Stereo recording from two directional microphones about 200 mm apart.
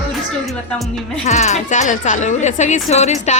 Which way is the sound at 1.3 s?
35° left (ahead or behind).